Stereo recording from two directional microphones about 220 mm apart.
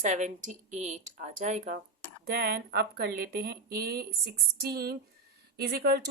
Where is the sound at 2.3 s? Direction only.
45° right (ahead or behind).